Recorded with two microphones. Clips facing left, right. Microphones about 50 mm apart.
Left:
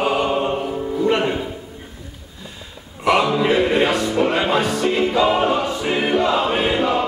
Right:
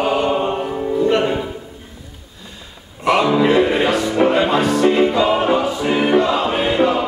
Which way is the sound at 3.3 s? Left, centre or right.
Centre.